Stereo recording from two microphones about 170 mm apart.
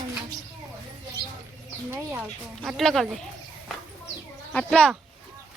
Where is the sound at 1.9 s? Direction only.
10° right (ahead or behind).